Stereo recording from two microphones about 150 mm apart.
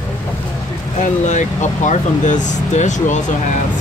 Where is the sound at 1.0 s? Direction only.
55° left (ahead or behind).